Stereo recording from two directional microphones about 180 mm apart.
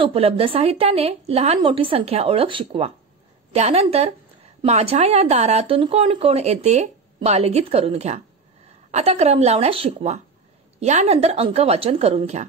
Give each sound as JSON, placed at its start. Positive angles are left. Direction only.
{"t": 0.0, "sound": "speech", "side_deg": -30}